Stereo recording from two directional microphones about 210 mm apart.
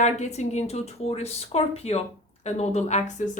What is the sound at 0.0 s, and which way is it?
A woman's voice, 35° left (ahead or behind).